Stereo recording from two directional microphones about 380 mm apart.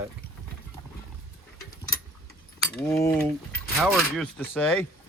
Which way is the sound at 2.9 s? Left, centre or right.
Centre.